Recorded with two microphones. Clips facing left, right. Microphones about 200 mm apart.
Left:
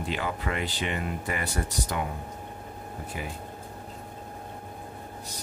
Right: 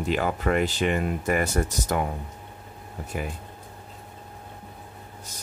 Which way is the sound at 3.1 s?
50° right (ahead or behind).